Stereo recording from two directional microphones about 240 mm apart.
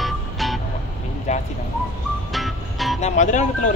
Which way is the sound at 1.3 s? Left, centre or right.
Left.